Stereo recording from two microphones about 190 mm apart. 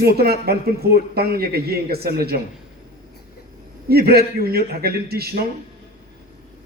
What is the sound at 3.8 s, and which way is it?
Speech, 55° right (ahead or behind).